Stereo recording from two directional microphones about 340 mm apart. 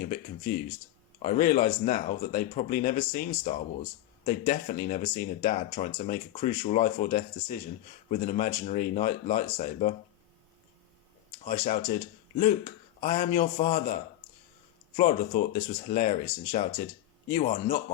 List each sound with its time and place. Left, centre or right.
0.0 s speech: left
11.4 s speech: left
13.0 s speech: left